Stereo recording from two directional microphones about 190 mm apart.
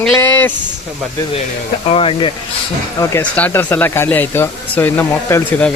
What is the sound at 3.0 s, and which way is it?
Speech, 10° left (ahead or behind).